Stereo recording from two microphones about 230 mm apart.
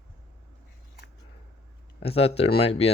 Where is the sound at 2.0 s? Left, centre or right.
Left.